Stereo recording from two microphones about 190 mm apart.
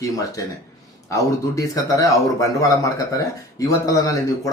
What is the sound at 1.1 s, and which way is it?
Speech, 15° left (ahead or behind).